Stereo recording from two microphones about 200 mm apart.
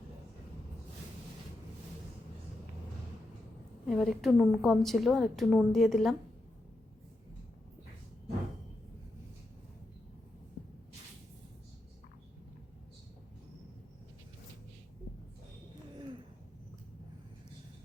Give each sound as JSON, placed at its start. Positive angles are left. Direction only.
{"t": 3.8, "sound": "a woman's voice", "side_deg": 0}